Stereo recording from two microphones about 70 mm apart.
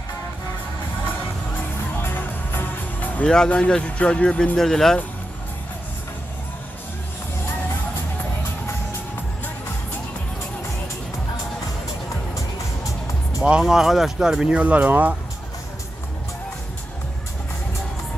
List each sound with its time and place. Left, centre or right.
2.0 s music: left
3.4 s speech: centre
13.4 s speech: centre